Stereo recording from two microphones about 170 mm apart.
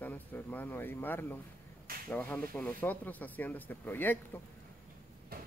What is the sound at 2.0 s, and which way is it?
Speech, 10° left (ahead or behind).